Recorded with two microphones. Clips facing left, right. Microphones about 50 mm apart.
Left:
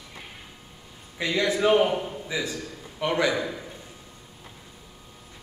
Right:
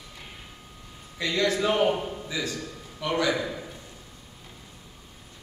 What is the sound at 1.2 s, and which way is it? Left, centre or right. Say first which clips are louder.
A man's voice: left 1 dB; centre.